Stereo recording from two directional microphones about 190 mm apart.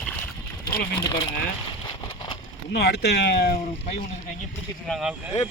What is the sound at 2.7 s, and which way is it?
Speech, 60° left (ahead or behind).